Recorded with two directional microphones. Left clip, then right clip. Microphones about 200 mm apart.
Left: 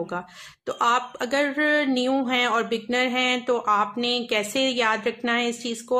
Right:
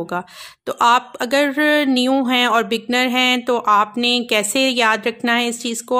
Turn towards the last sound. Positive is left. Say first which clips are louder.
# right 5 dB
turn(degrees=-35)  # may be behind; listen again after turning